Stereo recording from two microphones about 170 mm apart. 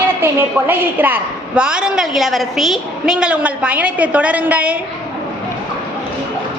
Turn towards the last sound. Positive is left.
turn(degrees=-10)  # may be behind; listen again after turning